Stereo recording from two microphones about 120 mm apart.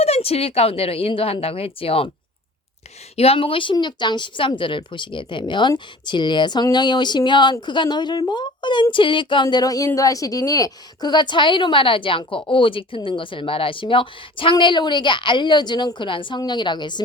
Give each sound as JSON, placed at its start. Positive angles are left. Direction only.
{"t": 0.0, "sound": "a woman's voice", "side_deg": 55}
{"t": 3.2, "sound": "a woman's voice", "side_deg": 50}